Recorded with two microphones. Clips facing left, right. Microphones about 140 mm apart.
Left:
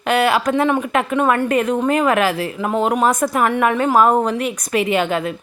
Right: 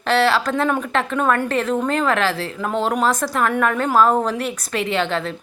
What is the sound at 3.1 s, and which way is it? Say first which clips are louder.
Speech: left 3 dB; 20° left (ahead or behind).